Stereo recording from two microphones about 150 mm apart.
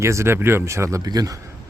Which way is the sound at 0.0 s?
20° right (ahead or behind).